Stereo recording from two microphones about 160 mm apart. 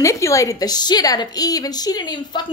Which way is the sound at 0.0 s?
20° left (ahead or behind).